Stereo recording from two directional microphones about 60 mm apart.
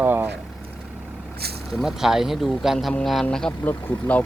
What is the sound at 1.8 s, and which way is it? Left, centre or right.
Speech, centre.